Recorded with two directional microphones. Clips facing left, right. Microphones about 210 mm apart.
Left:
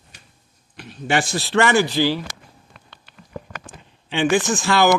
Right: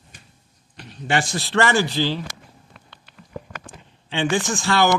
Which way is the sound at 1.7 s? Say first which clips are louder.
Left 3 dB; 10° left (ahead or behind).